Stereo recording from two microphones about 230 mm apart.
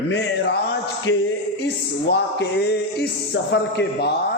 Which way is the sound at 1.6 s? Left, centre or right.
Left.